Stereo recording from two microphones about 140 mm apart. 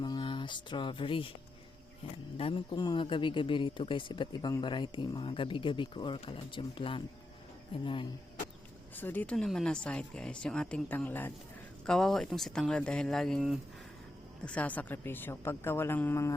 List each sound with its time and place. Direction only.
0.0 s speech: 35° left (ahead or behind)
2.4 s speech: 35° left (ahead or behind)
9.0 s speech: 15° left (ahead or behind)